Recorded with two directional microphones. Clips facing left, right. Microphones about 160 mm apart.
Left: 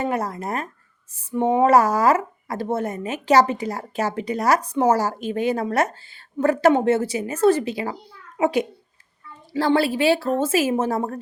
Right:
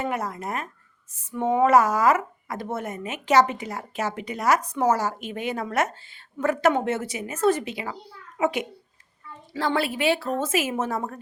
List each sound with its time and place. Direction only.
0.0 s speech: 35° left (ahead or behind)